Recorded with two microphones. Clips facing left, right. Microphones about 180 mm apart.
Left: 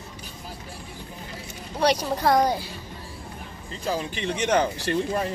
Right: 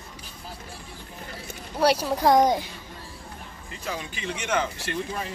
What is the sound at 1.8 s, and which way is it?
Speech, 5° right (ahead or behind).